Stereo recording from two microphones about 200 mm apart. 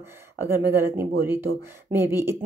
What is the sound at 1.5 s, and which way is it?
Speech, 45° right (ahead or behind).